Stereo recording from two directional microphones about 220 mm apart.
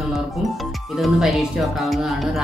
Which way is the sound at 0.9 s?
Centre (ahead or behind).